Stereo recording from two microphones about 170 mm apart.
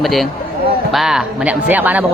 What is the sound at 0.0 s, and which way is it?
Speech, centre (ahead or behind).